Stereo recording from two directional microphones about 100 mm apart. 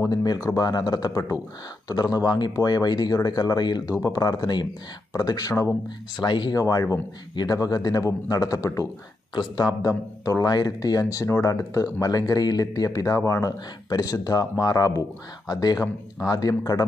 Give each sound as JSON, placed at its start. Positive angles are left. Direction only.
{"t": 0.0, "sound": "speech", "side_deg": 40}
{"t": 6.2, "sound": "speech", "side_deg": 45}
{"t": 9.3, "sound": "speech", "side_deg": 45}